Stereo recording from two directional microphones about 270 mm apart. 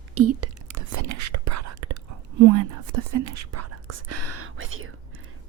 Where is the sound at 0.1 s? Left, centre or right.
Right.